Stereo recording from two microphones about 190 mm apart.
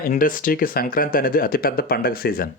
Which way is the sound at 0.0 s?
45° left (ahead or behind).